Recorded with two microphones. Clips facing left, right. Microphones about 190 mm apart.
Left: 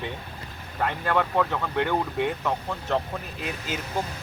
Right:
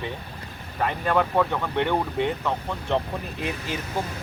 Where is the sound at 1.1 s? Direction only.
5° right (ahead or behind).